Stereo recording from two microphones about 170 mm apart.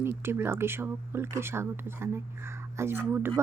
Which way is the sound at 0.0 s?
15° right (ahead or behind).